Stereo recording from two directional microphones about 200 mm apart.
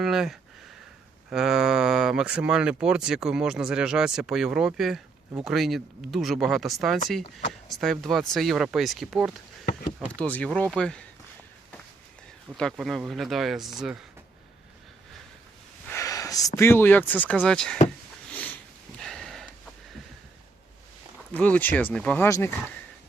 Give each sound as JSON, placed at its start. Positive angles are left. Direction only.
{"t": 0.0, "sound": "speech", "side_deg": 0}
{"t": 10.2, "sound": "speech", "side_deg": 5}
{"t": 12.7, "sound": "speech", "side_deg": 0}
{"t": 15.9, "sound": "a sound", "side_deg": 15}
{"t": 16.6, "sound": "speech", "side_deg": 10}
{"t": 18.3, "sound": "sniff", "side_deg": 5}
{"t": 18.9, "sound": "a sound", "side_deg": 0}
{"t": 21.3, "sound": "speech", "side_deg": 5}